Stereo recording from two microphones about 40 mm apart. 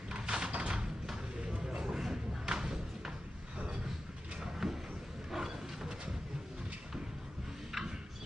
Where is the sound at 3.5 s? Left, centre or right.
Right.